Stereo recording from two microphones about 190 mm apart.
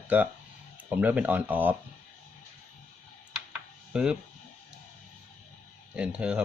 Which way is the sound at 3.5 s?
5° right (ahead or behind).